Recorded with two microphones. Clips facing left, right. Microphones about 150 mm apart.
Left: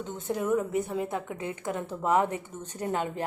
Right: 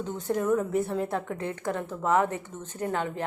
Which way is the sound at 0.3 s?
5° left (ahead or behind).